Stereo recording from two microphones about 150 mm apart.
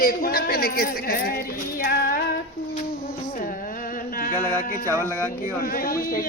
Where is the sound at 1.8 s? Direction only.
90° left.